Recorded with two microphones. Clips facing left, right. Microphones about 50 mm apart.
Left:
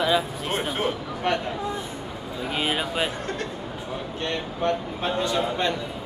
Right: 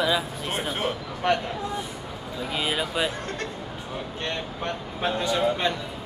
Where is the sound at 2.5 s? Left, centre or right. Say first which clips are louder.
Left 1 dB; left.